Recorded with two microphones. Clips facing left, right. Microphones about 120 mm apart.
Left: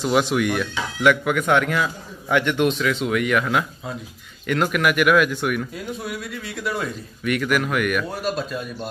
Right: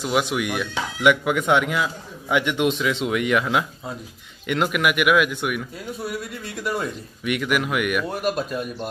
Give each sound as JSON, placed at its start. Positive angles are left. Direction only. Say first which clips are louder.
{"t": 0.0, "sound": "speech", "louder": "left 3 dB", "side_deg": -10}